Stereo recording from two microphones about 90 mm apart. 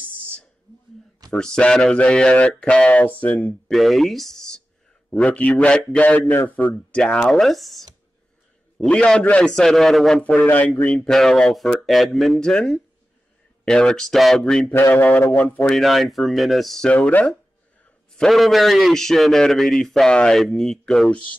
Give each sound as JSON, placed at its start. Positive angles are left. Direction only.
{"t": 1.3, "sound": "a man's voice", "side_deg": 10}
{"t": 3.7, "sound": "a man's voice", "side_deg": 0}
{"t": 10.2, "sound": "mantra", "side_deg": 20}
{"t": 10.8, "sound": "a man's voice", "side_deg": 15}
{"t": 14.7, "sound": "mantra", "side_deg": 25}
{"t": 15.3, "sound": "a man's voice", "side_deg": 15}
{"t": 15.7, "sound": "a man's voice", "side_deg": 0}
{"t": 16.9, "sound": "a man's voice", "side_deg": 15}
{"t": 18.1, "sound": "a man's voice", "side_deg": 5}